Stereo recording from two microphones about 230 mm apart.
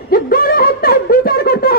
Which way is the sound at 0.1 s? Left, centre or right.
Left.